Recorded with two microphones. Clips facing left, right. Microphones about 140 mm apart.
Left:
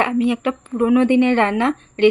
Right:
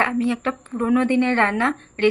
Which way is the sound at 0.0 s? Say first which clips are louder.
Left 3 dB; 15° left (ahead or behind).